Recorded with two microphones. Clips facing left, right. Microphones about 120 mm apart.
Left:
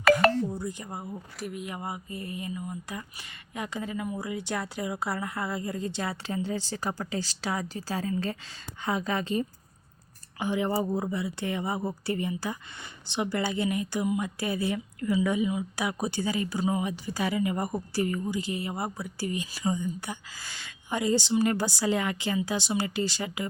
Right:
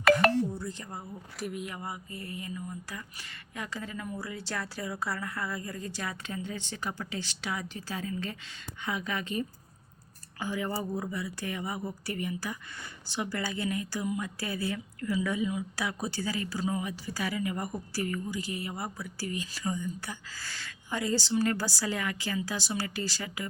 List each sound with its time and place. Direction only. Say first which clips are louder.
0.0 s telephone dialing: left 2 dB; centre (ahead or behind)
0.4 s speech: left 3 dB; 15° left (ahead or behind)
1.4 s speech: right 1 dB; centre (ahead or behind)
1.6 s a woman's voice: left 3 dB; 25° left (ahead or behind)